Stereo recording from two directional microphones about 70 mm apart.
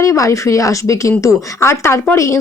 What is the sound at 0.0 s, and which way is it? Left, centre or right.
Speech, left.